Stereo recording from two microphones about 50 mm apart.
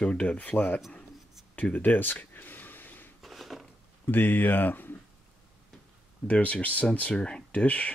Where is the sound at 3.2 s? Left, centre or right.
Centre.